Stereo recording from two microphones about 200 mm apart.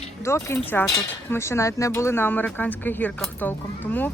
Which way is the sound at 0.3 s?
10° left (ahead or behind).